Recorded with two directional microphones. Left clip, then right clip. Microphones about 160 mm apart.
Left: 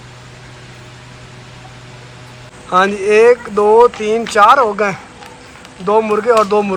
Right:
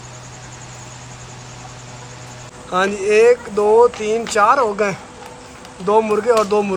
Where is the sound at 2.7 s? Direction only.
5° right (ahead or behind).